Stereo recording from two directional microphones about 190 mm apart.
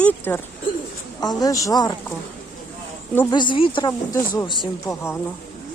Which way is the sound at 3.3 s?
25° left (ahead or behind).